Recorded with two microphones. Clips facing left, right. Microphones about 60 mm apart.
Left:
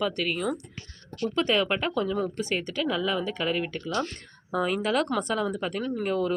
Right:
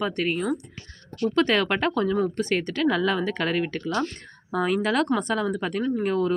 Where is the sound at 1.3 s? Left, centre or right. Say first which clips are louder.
Right 3 dB; right.